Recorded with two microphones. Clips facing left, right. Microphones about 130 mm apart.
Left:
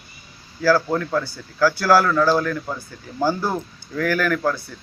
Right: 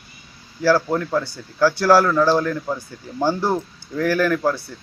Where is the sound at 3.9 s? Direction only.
25° right (ahead or behind).